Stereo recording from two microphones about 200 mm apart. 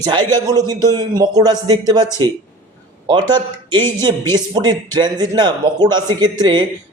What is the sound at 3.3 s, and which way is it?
A man's voice, 20° right (ahead or behind).